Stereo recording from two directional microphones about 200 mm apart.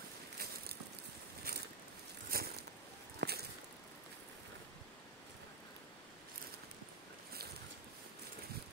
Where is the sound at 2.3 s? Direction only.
50° right (ahead or behind).